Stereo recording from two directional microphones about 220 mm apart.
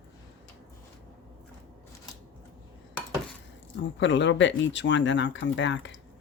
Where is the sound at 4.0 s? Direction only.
55° left (ahead or behind).